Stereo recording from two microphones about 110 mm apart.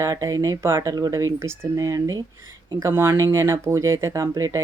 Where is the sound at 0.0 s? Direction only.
30° right (ahead or behind).